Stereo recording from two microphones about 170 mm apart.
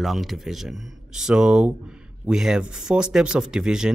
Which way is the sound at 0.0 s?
Centre (ahead or behind).